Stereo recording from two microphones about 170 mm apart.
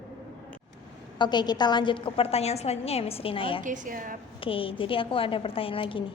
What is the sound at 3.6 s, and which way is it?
Speech, 50° right (ahead or behind).